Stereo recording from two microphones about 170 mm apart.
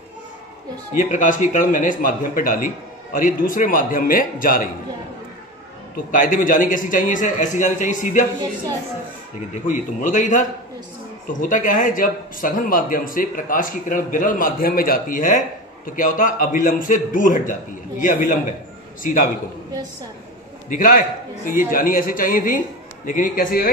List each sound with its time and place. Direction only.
0.9 s speech: 50° left (ahead or behind)
6.1 s speech: 55° left (ahead or behind)
9.7 s speech: 50° left (ahead or behind)
20.7 s a man's voice: 55° left (ahead or behind)